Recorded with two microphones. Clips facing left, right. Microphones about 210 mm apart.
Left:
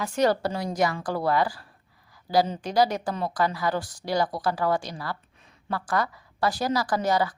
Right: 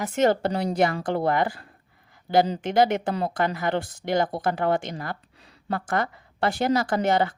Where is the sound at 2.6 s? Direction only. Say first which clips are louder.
Right 2 dB; 25° right (ahead or behind).